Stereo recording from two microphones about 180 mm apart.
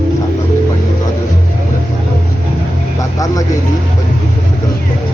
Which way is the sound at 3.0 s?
20° left (ahead or behind).